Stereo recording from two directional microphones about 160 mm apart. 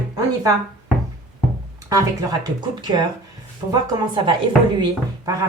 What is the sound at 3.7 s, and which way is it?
Speech, 30° right (ahead or behind).